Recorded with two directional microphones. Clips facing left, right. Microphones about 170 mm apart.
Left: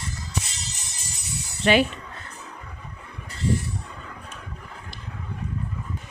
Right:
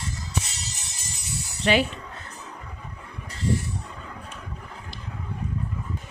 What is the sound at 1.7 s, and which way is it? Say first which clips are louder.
Speech: left 2 dB; 60° left (ahead or behind).